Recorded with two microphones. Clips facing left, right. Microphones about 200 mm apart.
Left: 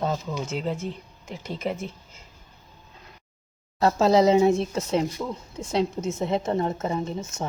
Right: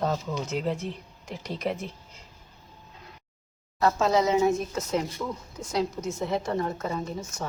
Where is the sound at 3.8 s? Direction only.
30° left (ahead or behind).